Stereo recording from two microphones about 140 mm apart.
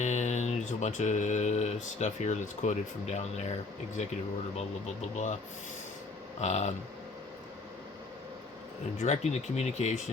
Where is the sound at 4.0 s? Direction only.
55° left (ahead or behind).